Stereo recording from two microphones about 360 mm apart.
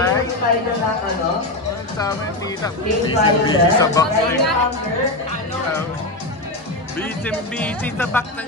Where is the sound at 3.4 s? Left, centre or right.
Centre.